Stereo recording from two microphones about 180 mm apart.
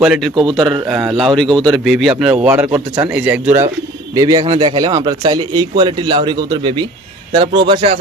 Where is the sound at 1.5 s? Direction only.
25° right (ahead or behind).